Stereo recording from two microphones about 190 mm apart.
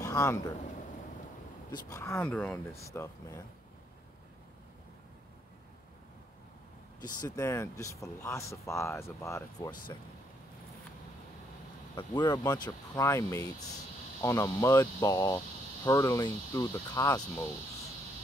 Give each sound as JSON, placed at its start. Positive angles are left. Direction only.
{"t": 0.0, "sound": "speech", "side_deg": 15}
{"t": 1.7, "sound": "speech", "side_deg": 15}
{"t": 7.0, "sound": "speech", "side_deg": 20}
{"t": 11.9, "sound": "speech", "side_deg": 25}